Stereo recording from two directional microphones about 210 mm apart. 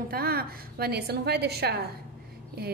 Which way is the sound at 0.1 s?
45° right (ahead or behind).